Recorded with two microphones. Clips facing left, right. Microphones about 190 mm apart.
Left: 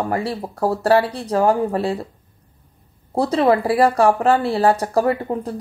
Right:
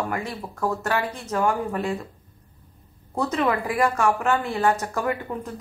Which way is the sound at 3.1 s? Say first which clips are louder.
Left 7 dB; 35° left (ahead or behind).